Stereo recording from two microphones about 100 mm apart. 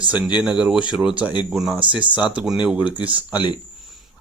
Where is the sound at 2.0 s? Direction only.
50° left (ahead or behind).